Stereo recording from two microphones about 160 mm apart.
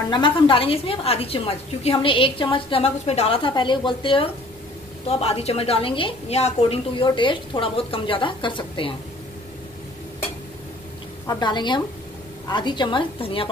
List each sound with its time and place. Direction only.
0.1 s a woman's voice: 30° left (ahead or behind)
7.1 s a woman's voice: 30° left (ahead or behind)
11.2 s a woman's voice: 25° left (ahead or behind)